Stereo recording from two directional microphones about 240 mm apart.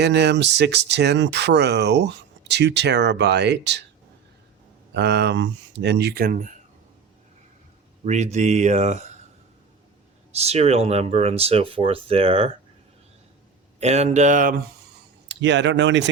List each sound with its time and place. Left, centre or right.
0.0 s speech: right
4.9 s speech: right
8.0 s speech: right
10.3 s speech: right
13.7 s speech: right
15.3 s speech: right